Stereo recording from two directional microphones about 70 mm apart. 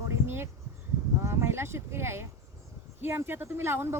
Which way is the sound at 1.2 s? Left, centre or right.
Right.